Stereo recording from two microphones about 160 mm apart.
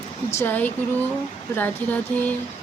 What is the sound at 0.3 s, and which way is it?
Speech, 10° left (ahead or behind).